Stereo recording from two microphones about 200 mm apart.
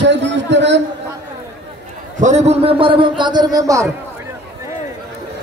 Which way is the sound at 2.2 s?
35° right (ahead or behind).